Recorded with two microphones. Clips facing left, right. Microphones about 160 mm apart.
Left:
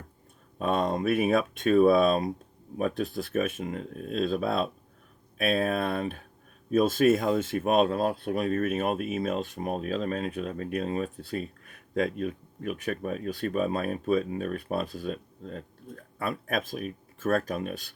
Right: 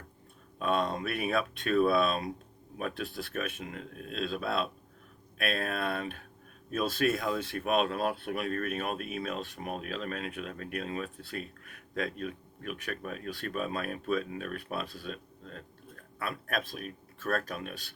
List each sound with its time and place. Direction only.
0.6 s speech: 45° left (ahead or behind)